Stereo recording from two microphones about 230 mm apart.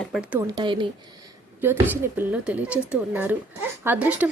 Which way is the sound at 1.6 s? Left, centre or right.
Centre.